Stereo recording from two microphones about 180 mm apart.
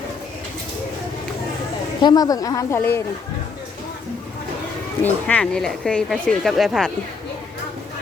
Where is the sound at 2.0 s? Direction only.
20° left (ahead or behind).